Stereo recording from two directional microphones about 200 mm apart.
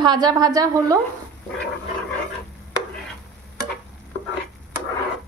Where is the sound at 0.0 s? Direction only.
20° right (ahead or behind).